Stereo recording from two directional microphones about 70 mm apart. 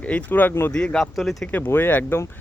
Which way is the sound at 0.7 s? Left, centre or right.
Centre.